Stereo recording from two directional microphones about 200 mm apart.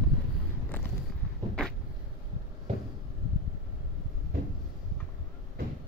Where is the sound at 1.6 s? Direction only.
5° left (ahead or behind).